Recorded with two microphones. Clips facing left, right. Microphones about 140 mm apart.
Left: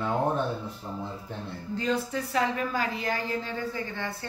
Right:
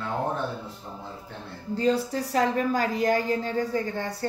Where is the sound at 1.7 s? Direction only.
35° right (ahead or behind).